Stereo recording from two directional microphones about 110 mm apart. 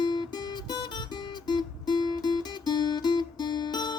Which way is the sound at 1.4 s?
45° left (ahead or behind).